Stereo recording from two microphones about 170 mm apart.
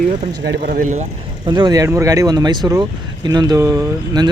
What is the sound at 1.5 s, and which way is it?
Speech, 25° right (ahead or behind).